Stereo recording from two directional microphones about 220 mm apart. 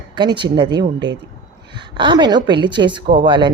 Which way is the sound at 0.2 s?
20° right (ahead or behind).